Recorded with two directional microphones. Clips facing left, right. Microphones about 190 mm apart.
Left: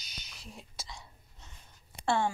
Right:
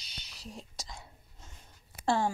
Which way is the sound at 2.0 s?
35° right (ahead or behind).